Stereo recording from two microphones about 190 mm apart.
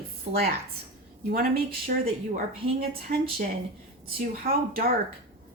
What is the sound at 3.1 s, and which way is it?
Speech, 45° right (ahead or behind).